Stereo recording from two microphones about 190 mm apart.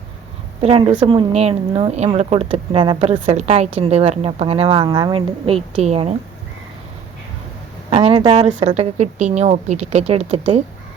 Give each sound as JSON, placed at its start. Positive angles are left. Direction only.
{"t": 0.6, "sound": "a woman's voice", "side_deg": -30}
{"t": 7.9, "sound": "speech", "side_deg": -25}
{"t": 8.4, "sound": "speech", "side_deg": -35}